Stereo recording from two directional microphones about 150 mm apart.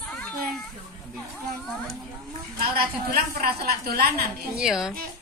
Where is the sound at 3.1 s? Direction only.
80° right.